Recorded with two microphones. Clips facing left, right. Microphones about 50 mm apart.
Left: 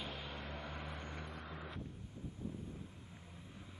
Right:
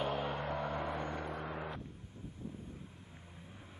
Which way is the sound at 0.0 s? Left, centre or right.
Right.